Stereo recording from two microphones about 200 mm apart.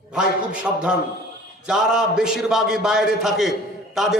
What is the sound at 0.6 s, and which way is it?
A man's voice, 5° right (ahead or behind).